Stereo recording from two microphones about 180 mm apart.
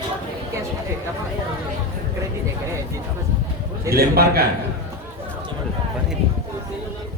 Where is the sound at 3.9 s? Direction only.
60° right (ahead or behind).